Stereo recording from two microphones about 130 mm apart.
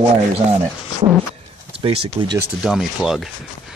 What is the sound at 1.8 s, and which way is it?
Speech, 45° right (ahead or behind).